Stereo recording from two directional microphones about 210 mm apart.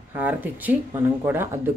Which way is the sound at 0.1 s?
10° right (ahead or behind).